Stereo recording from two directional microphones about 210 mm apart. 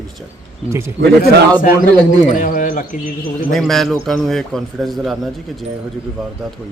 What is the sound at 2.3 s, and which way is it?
Speech, 40° left (ahead or behind).